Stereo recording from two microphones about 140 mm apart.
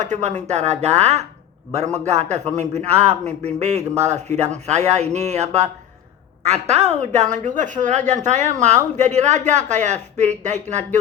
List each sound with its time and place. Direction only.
0.0 s a woman's voice: 55° right (ahead or behind)